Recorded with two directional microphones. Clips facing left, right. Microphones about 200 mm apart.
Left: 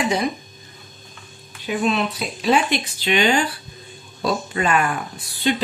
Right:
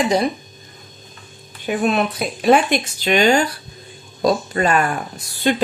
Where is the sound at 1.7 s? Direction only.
50° right (ahead or behind).